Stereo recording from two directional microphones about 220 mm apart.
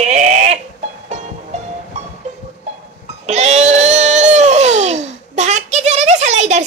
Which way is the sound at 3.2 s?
30° right (ahead or behind).